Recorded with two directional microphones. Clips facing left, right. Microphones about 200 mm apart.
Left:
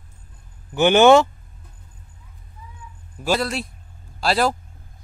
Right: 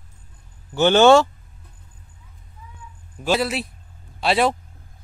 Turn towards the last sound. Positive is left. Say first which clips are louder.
# right 1 dB
turn(degrees=0)  # may be behind; listen again after turning